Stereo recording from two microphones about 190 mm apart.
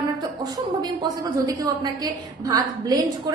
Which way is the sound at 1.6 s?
20° right (ahead or behind).